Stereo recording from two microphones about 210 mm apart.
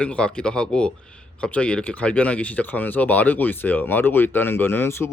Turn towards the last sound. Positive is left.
turn(degrees=10)  # may be behind; listen again after turning